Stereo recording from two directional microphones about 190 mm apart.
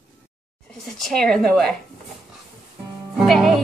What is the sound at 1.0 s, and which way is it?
Speech, centre (ahead or behind).